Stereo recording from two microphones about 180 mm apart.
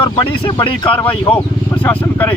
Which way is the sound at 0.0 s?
30° left (ahead or behind).